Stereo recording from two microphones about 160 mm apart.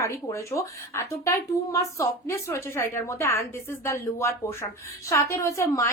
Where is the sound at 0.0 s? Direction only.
20° left (ahead or behind).